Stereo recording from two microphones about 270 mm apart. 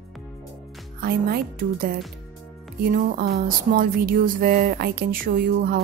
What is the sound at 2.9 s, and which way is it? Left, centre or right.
Speech, right.